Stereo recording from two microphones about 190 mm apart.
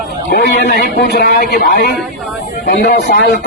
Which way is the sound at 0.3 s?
55° left (ahead or behind).